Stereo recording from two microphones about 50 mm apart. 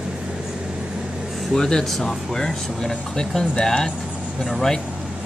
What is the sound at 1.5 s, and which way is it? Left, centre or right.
Speech, centre.